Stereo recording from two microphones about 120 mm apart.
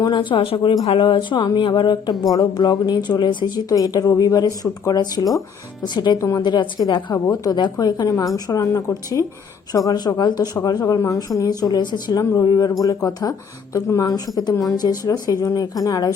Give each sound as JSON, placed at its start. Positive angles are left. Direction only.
{"t": 0.0, "sound": "speech", "side_deg": 40}